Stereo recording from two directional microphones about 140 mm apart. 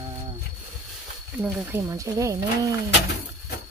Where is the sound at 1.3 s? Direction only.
10° right (ahead or behind).